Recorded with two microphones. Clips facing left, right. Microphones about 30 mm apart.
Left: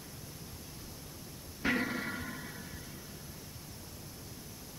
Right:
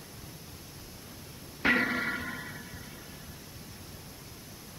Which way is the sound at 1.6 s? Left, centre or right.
Right.